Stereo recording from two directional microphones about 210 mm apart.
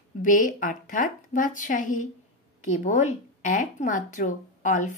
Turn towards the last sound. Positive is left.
turn(degrees=40)  # may be behind; listen again after turning